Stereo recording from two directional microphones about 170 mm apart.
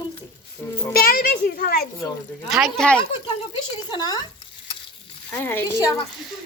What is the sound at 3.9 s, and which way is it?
Speech, 25° left (ahead or behind).